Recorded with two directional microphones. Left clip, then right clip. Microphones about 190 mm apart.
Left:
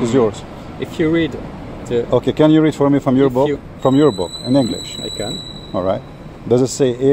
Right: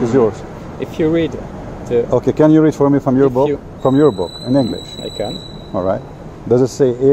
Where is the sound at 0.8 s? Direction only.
35° left (ahead or behind).